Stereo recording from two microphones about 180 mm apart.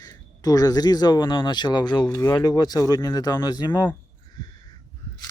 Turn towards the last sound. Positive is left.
turn(degrees=20)  # may be behind; listen again after turning